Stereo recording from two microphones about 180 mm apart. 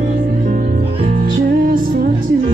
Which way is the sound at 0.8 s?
35° right (ahead or behind).